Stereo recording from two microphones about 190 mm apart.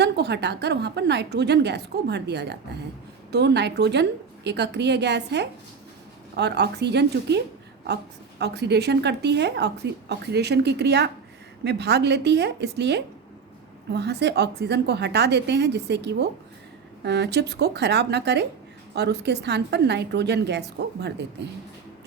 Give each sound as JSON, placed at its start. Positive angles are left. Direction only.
{"t": 0.0, "sound": "a woman's voice", "side_deg": -60}